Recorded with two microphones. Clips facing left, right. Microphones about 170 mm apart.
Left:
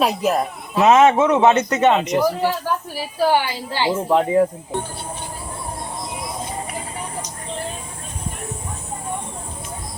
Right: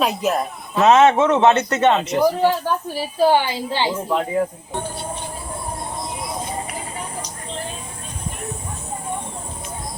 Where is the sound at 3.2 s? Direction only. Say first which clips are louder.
Right 2 dB; 20° right (ahead or behind).